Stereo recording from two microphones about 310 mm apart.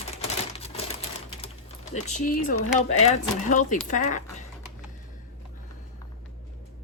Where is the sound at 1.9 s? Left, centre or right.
Left.